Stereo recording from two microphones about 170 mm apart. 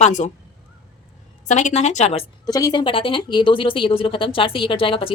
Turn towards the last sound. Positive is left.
turn(degrees=30)  # may be behind; listen again after turning